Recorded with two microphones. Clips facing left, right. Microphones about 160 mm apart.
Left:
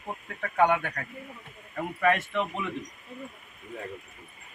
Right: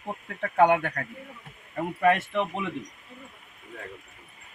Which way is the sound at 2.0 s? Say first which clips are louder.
Right 2 dB; 30° right (ahead or behind).